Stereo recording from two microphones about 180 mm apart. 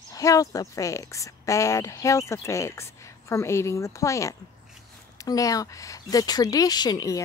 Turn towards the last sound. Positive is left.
turn(degrees=20)  # may be behind; listen again after turning